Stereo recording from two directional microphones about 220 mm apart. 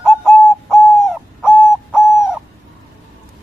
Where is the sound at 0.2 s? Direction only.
Centre (ahead or behind).